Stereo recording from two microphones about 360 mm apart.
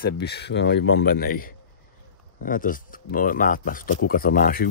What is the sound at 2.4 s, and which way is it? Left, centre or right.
Speech, left.